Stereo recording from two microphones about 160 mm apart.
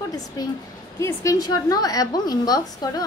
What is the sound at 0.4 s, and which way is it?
A woman's voice, 25° left (ahead or behind).